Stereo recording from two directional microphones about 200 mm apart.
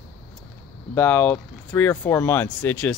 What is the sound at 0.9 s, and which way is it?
Speech, 10° left (ahead or behind).